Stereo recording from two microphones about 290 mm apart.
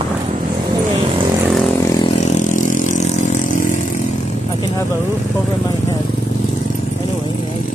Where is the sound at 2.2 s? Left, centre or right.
Left.